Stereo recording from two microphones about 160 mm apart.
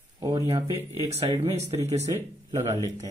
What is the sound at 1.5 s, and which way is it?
Speech, 40° right (ahead or behind).